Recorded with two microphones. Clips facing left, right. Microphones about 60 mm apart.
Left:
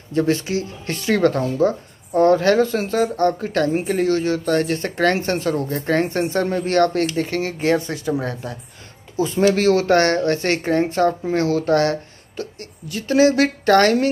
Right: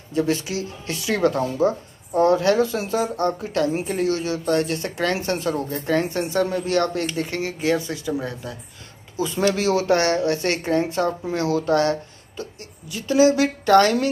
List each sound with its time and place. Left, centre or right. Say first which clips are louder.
0.1 s speech: left 3 dB; left